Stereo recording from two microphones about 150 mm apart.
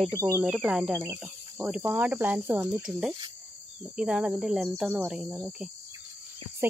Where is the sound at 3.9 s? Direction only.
5° right (ahead or behind).